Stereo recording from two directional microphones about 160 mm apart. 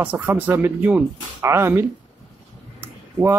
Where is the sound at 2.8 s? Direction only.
15° right (ahead or behind).